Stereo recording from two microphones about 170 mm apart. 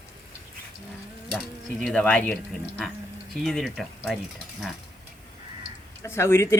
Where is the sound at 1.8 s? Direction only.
5° left (ahead or behind).